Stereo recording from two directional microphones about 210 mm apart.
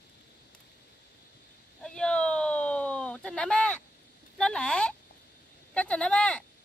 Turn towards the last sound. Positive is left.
turn(degrees=5)  # may be behind; listen again after turning